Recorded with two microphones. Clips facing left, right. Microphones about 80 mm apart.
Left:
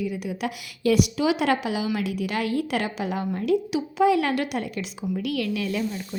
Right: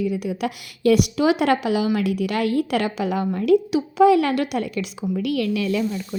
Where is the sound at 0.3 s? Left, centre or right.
Right.